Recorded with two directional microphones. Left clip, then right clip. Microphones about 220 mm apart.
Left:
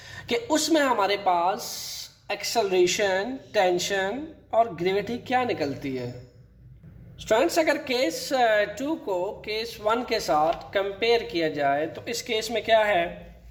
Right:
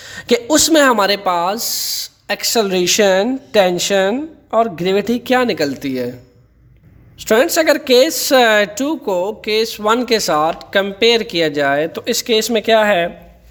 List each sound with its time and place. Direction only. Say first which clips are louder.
0.0 s speech: right 12 dB; 55° right (ahead or behind)
7.3 s speech: right 9 dB; 50° right (ahead or behind)